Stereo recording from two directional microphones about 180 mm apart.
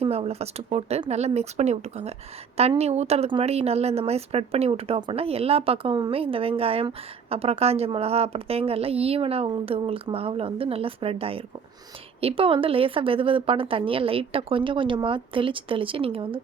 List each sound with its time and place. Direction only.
0.0 s a woman's voice: 35° right (ahead or behind)